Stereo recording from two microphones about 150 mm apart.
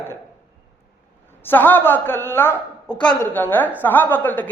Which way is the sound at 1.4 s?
10° left (ahead or behind).